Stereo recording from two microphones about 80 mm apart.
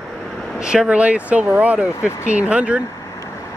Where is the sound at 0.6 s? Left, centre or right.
Centre.